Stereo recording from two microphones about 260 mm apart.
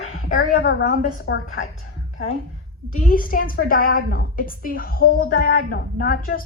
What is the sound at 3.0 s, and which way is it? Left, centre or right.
A woman's voice, left.